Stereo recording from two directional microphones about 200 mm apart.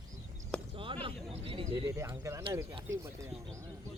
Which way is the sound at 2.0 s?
15° right (ahead or behind).